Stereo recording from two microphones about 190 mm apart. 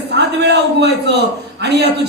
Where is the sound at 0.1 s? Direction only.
60° right (ahead or behind).